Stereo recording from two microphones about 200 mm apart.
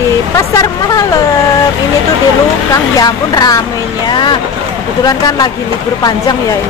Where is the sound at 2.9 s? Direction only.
20° left (ahead or behind).